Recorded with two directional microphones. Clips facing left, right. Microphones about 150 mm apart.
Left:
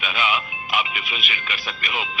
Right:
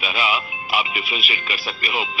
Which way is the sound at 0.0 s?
35° right (ahead or behind).